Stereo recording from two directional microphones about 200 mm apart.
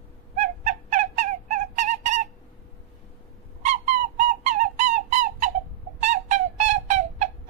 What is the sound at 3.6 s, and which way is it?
Bird, 35° right (ahead or behind).